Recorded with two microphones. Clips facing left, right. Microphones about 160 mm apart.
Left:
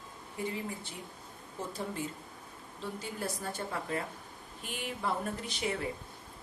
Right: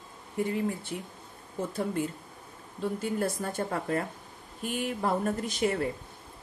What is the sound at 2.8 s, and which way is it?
Speech, 55° right (ahead or behind).